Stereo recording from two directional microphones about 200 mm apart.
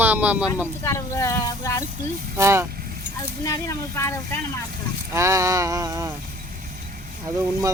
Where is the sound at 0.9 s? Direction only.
15° left (ahead or behind).